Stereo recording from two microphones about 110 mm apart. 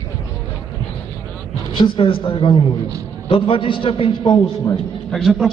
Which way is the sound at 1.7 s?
50° left (ahead or behind).